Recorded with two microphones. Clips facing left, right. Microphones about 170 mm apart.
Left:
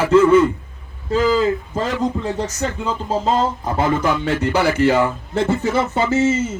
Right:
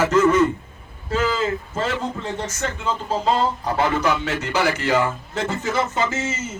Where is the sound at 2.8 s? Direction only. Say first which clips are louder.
Left 1 dB; 20° left (ahead or behind).